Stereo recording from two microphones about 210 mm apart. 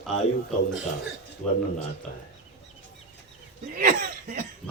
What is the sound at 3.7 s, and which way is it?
Speech, 40° right (ahead or behind).